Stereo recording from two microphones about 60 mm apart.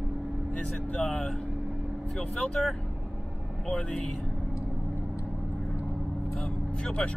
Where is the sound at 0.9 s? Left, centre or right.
Centre.